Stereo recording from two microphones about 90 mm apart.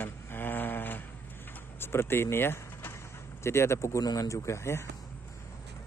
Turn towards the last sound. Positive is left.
turn(degrees=30)  # may be behind; listen again after turning